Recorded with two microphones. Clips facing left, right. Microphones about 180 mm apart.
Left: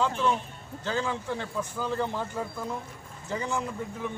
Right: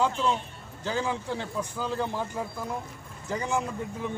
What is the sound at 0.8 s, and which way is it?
A man's voice, 15° right (ahead or behind).